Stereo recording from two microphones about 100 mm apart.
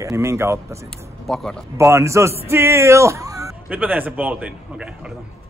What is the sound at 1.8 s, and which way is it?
Speech, 30° right (ahead or behind).